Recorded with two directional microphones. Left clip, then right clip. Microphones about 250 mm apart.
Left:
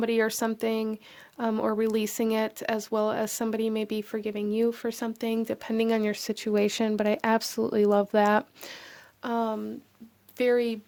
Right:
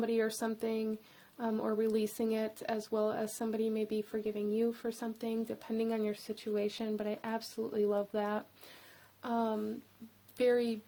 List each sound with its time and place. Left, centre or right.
0.0 s speech: left
9.2 s speech: left